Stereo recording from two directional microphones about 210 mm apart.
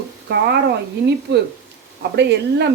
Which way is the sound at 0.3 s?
55° right (ahead or behind).